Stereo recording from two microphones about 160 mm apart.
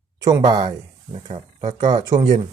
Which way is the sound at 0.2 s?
20° right (ahead or behind).